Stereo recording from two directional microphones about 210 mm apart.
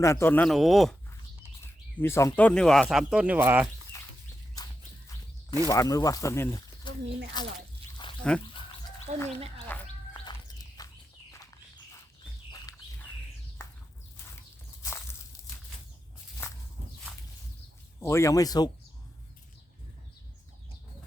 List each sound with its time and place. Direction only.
0.0 s speech: 15° left (ahead or behind)
1.6 s speech: 10° left (ahead or behind); by 3.7 s 10° right (ahead or behind)
4.5 s a sound: 15° left (ahead or behind)
5.6 s speech: 15° left (ahead or behind)
8.0 s a sound: 20° left (ahead or behind)
9.1 s speech: 30° right (ahead or behind)
9.7 s a sound: 10° left (ahead or behind)
12.5 s bird: 15° left (ahead or behind)
18.0 s speech: 15° left (ahead or behind)